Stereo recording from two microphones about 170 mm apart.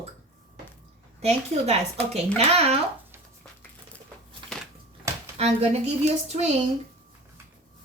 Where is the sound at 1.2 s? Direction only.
40° right (ahead or behind).